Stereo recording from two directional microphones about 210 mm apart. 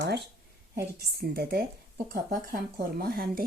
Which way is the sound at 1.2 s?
45° right (ahead or behind).